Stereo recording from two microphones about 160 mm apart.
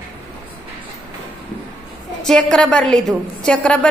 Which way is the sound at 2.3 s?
5° left (ahead or behind).